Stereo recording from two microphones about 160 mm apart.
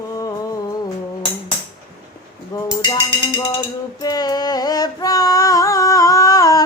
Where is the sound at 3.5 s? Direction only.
25° left (ahead or behind).